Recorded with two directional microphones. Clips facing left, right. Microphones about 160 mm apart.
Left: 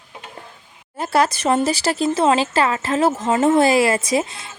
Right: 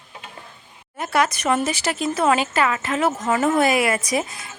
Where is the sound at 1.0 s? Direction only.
30° left (ahead or behind).